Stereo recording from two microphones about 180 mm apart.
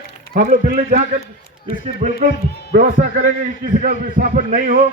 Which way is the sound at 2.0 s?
40° right (ahead or behind).